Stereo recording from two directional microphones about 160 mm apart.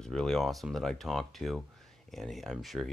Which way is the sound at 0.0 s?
5° left (ahead or behind).